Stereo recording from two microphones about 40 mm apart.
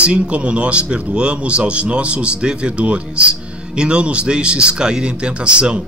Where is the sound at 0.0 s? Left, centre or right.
Right.